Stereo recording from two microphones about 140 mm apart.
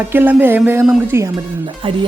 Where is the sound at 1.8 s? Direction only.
40° right (ahead or behind).